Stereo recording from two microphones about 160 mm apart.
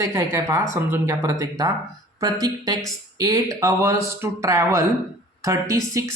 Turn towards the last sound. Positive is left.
turn(degrees=-20)  # may be behind; listen again after turning